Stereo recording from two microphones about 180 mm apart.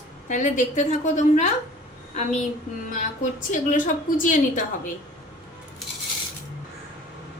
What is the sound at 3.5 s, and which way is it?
A woman's voice, 45° left (ahead or behind).